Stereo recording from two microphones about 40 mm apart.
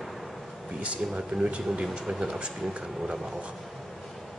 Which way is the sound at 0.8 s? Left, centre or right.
Right.